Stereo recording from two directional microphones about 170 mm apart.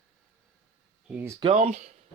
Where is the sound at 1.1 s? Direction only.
10° right (ahead or behind).